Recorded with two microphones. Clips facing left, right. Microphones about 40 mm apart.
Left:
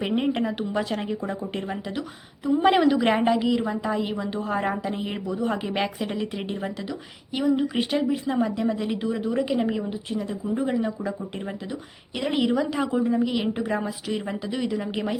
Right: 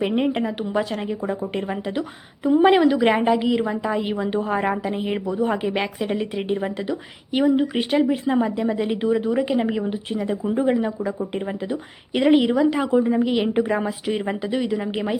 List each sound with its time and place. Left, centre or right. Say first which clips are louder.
0.0 s speech: right 3 dB; centre
1.2 s a woman's voice: right 4 dB; centre
2.4 s a woman's voice: right 6 dB; right
2.6 s a woman's voice: right 2 dB; centre; by 4.4 s right
4.4 s a woman's voice: right 3 dB; centre
5.7 s a woman's voice: right 3 dB; centre; by 8.4 s right
8.4 s a woman's voice: right 3 dB; centre
12.1 s a woman's voice: right 11 dB; right
12.4 s a woman's voice: right 4 dB; centre
14.6 s a woman's voice: right 3 dB; centre